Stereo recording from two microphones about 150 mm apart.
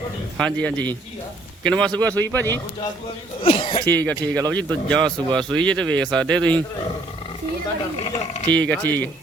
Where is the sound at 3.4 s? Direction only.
35° left (ahead or behind).